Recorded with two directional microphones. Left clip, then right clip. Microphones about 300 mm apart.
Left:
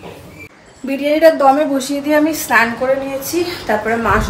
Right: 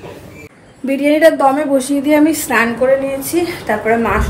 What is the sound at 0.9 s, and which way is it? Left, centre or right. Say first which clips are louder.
Speech: right 1 dB; centre.